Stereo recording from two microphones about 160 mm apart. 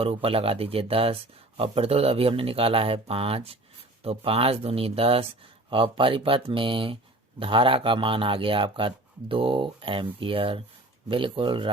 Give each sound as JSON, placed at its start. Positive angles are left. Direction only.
{"t": 0.0, "sound": "speech", "side_deg": -35}